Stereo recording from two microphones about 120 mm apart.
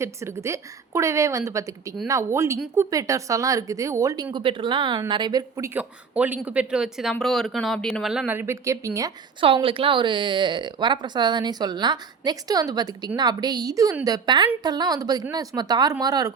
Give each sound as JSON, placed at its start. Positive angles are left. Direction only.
{"t": 0.0, "sound": "a woman's voice", "side_deg": -25}
{"t": 4.3, "sound": "a woman's voice", "side_deg": -45}
{"t": 5.6, "sound": "speech", "side_deg": -15}
{"t": 8.3, "sound": "a woman's voice", "side_deg": -20}
{"t": 9.4, "sound": "a woman's voice", "side_deg": -45}